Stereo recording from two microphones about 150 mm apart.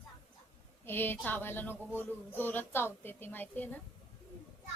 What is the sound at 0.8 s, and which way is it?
A woman's voice, 15° left (ahead or behind).